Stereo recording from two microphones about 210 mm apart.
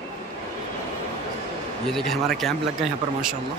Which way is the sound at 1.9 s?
Centre (ahead or behind).